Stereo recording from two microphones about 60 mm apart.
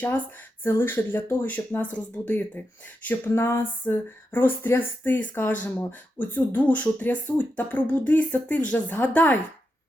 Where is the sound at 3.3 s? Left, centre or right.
Left.